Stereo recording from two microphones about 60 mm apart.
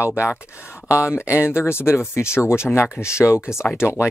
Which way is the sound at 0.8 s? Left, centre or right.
Left.